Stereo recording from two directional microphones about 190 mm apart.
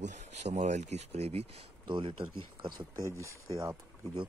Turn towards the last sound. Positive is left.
turn(degrees=-25)  # may be behind; listen again after turning